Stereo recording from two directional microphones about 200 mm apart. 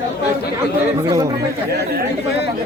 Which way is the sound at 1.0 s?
15° right (ahead or behind).